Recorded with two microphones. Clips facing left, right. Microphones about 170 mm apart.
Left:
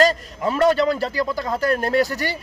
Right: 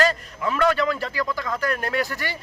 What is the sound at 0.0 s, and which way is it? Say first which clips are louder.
Speech: left 4 dB; 35° left (ahead or behind).